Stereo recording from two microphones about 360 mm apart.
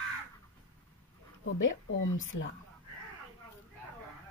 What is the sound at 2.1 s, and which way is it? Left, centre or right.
Speech, left.